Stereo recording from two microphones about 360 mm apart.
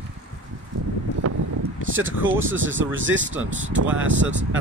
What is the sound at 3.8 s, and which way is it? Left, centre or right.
Speech, right.